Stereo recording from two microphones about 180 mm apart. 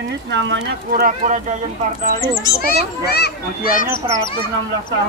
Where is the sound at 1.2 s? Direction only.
45° right (ahead or behind).